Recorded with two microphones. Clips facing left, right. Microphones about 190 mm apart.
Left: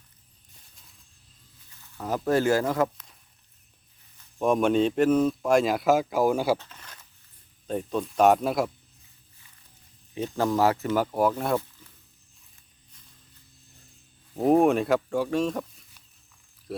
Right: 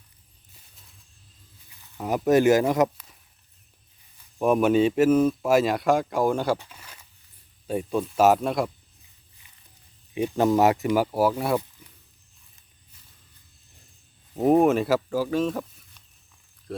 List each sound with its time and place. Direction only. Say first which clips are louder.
1.7 s speech: right 3 dB; 15° right (ahead or behind)
4.4 s speech: right 2 dB; 10° right (ahead or behind)
6.6 s a sound: right 1 dB; 10° right (ahead or behind)
7.7 s speech: right 2 dB; 10° right (ahead or behind)
10.2 s speech: right 4 dB; 15° right (ahead or behind)
14.3 s speech: right 1 dB; centre (ahead or behind)